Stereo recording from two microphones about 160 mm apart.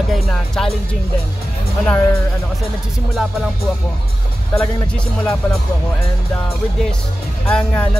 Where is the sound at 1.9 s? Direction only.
15° left (ahead or behind).